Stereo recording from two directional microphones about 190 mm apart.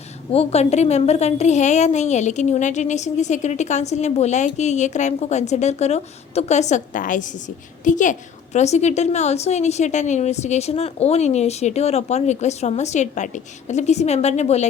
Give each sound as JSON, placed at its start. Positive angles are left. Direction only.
{"t": 0.3, "sound": "a woman's voice", "side_deg": 35}